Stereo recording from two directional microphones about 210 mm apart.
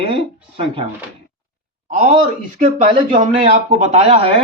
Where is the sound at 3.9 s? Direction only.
30° right (ahead or behind).